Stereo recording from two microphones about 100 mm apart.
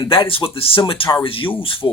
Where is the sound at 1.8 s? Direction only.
40° left (ahead or behind).